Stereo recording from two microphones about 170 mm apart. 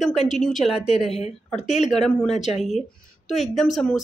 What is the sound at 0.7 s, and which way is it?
A woman's voice, 35° left (ahead or behind).